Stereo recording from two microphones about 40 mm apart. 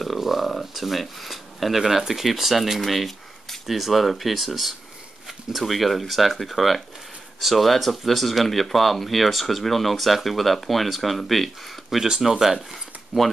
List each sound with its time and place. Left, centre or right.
0.0 s speech: centre
12.0 s speech: centre
13.1 s speech: right